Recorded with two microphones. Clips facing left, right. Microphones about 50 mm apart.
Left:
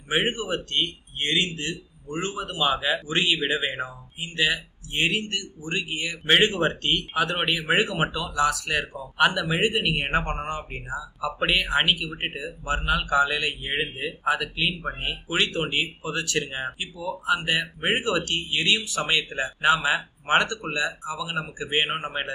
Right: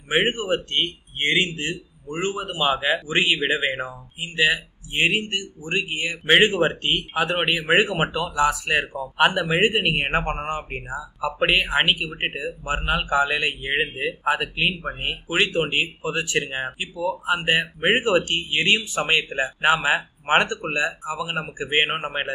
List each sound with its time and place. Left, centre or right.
0.1 s speech: right